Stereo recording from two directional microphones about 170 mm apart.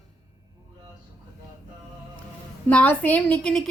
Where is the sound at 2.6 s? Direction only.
10° left (ahead or behind).